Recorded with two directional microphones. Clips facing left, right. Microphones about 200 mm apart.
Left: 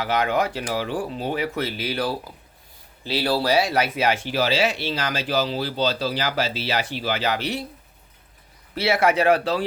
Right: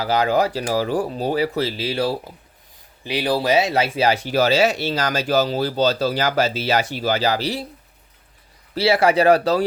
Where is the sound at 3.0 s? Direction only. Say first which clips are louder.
Right 2 dB; 15° right (ahead or behind); by 7.6 s 35° right (ahead or behind).